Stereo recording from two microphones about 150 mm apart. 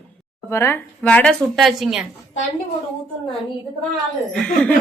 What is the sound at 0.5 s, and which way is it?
Speech, 15° left (ahead or behind).